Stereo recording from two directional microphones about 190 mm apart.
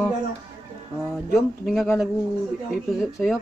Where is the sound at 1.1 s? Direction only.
Centre (ahead or behind).